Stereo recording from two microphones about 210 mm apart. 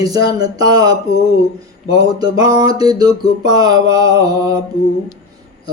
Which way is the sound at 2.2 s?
20° right (ahead or behind).